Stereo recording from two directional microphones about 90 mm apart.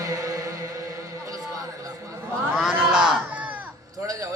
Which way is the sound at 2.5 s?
5° right (ahead or behind).